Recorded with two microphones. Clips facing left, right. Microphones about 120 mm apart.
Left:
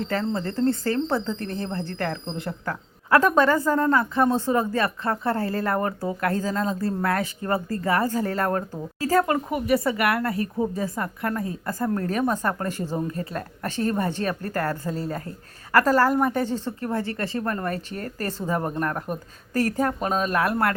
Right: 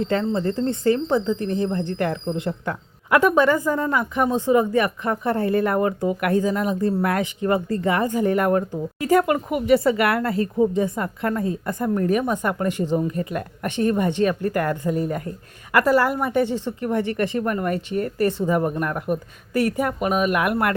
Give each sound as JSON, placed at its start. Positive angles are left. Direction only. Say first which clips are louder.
{"t": 0.0, "sound": "speech", "louder": "right 4 dB", "side_deg": -25}
{"t": 3.2, "sound": "speech", "louder": "right 2 dB", "side_deg": -15}
{"t": 13.1, "sound": "speech", "louder": "right 4 dB", "side_deg": 30}
{"t": 13.7, "sound": "speech", "louder": "right 4 dB", "side_deg": -20}